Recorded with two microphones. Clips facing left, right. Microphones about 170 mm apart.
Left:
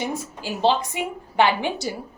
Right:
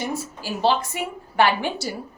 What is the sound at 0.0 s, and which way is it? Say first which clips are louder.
A woman's voice: even; 20° left (ahead or behind).